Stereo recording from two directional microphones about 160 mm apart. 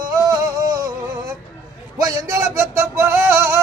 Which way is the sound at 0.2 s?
25° right (ahead or behind).